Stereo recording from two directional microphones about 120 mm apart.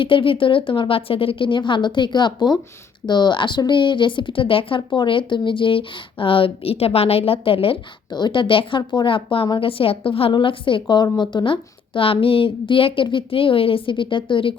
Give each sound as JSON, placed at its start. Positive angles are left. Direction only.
{"t": 0.0, "sound": "speech", "side_deg": 45}